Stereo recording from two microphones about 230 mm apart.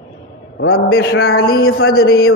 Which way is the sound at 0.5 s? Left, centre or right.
Left.